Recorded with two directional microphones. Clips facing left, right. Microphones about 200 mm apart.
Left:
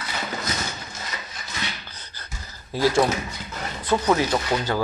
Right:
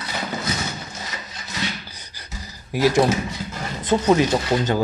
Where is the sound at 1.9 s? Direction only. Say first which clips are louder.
Right 2 dB; 10° right (ahead or behind).